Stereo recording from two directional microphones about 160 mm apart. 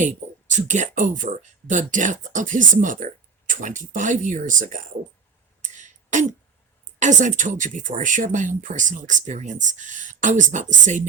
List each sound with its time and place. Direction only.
0.0 s speech: 50° right (ahead or behind)
5.6 s a sound: 50° right (ahead or behind)
7.0 s speech: 50° right (ahead or behind)